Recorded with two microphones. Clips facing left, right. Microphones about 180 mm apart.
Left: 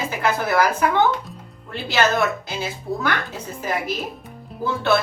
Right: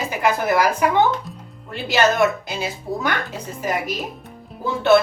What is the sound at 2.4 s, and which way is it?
Speech, 15° right (ahead or behind).